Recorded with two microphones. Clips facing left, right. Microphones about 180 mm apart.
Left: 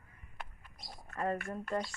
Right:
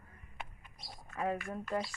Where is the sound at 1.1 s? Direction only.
Centre (ahead or behind).